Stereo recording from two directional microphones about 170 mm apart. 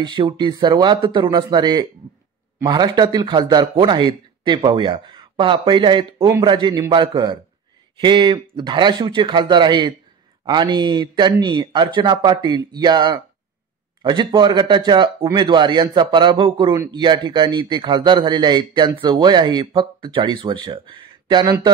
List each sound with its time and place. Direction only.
0.0 s a man's voice: 25° right (ahead or behind)